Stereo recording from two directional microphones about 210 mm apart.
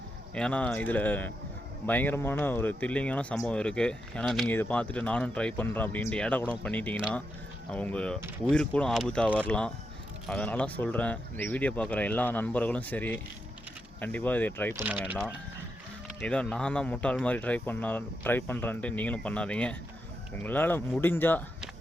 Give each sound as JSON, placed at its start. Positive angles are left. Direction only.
{"t": 0.3, "sound": "speech", "side_deg": 5}
{"t": 14.8, "sound": "speech", "side_deg": -10}
{"t": 16.2, "sound": "speech", "side_deg": 5}